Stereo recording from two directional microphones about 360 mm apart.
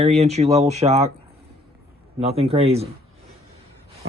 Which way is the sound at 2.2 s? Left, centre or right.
Centre.